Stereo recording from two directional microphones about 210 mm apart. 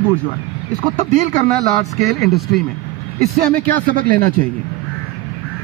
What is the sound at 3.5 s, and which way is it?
Speech, 40° right (ahead or behind).